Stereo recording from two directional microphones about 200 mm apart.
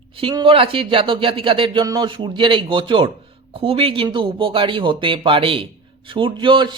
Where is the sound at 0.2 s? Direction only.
25° right (ahead or behind).